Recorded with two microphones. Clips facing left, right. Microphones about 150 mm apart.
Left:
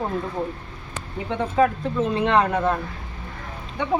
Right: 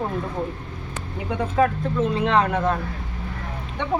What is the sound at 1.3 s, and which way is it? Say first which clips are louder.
Speech: left 1 dB; centre (ahead or behind).